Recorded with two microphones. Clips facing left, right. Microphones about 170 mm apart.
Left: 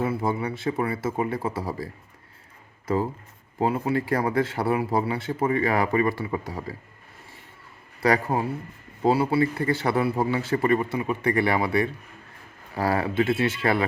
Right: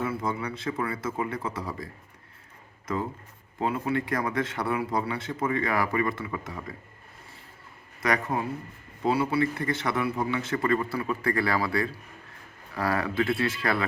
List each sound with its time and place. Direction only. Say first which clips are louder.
0.0 s speech: left 4 dB; 30° left (ahead or behind)
8.0 s a man's voice: left 5 dB; 30° left (ahead or behind)